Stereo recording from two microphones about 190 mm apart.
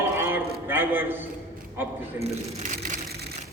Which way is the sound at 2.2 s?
45° right (ahead or behind).